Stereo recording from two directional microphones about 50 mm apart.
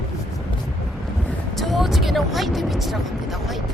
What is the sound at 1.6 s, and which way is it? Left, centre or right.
Speech, centre.